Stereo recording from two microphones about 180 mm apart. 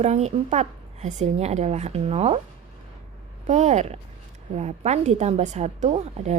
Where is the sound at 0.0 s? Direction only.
35° right (ahead or behind).